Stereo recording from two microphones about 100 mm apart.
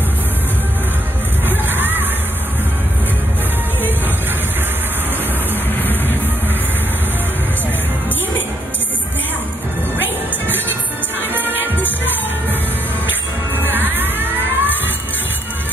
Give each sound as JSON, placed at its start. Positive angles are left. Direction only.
{"t": 1.4, "sound": "music", "side_deg": -20}
{"t": 5.8, "sound": "music", "side_deg": 20}
{"t": 11.1, "sound": "music", "side_deg": -20}
{"t": 13.6, "sound": "music", "side_deg": -20}